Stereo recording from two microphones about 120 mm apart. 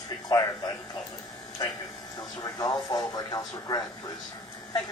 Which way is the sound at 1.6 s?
30° left (ahead or behind).